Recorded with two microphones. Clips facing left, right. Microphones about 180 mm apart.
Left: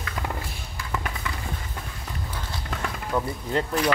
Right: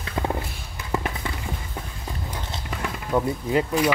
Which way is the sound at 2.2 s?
15° right (ahead or behind).